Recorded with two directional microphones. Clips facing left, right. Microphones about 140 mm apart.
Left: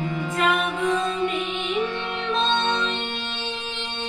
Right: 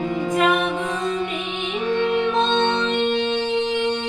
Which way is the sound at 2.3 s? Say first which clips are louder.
Right 4 dB; 20° right (ahead or behind).